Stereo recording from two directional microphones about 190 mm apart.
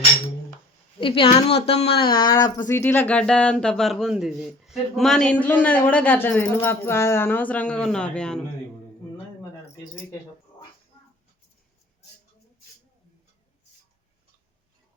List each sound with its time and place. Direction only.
0.9 s a woman's voice: 30° left (ahead or behind); by 8.4 s 5° left (ahead or behind)